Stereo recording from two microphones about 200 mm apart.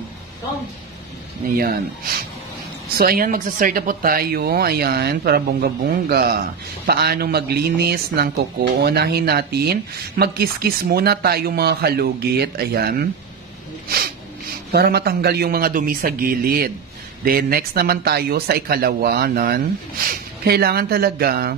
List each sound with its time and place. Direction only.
1.6 s speech: 45° right (ahead or behind)
13.8 s snort: 50° right (ahead or behind)
14.7 s speech: 50° right (ahead or behind)